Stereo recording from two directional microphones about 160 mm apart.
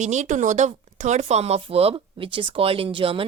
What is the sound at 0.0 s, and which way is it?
A woman's voice, 45° right (ahead or behind).